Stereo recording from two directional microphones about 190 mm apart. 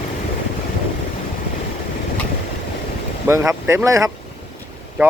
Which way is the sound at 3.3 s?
15° right (ahead or behind).